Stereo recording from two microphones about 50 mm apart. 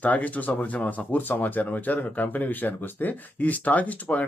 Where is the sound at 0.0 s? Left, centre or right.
Left.